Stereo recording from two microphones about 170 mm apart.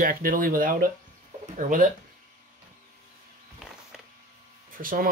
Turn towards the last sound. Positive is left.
turn(degrees=-55)  # may be behind; listen again after turning